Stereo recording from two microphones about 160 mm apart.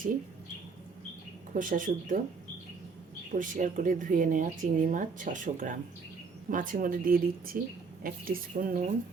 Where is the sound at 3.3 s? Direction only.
55° right (ahead or behind).